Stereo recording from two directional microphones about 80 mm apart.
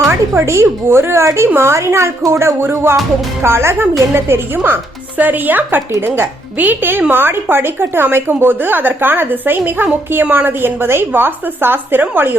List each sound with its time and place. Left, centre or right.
0.1 s a woman's voice: right